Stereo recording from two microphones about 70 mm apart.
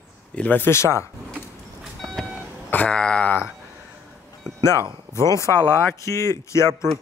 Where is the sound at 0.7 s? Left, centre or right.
Left.